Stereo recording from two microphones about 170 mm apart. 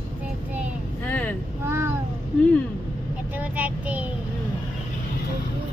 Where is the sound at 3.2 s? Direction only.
10° right (ahead or behind).